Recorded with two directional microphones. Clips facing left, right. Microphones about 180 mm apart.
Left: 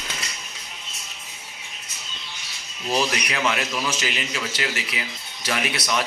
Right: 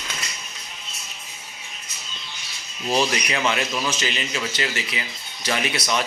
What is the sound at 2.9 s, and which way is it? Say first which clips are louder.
A man's voice: right 2 dB; centre (ahead or behind).